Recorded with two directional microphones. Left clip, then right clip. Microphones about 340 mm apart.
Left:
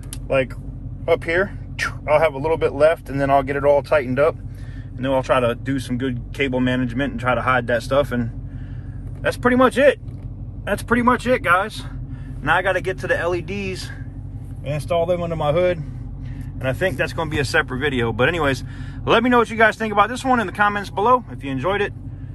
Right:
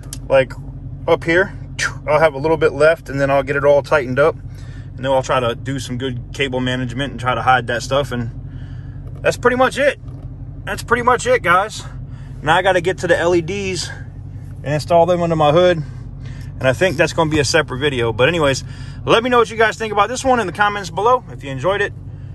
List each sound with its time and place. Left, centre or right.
1.0 s speech: centre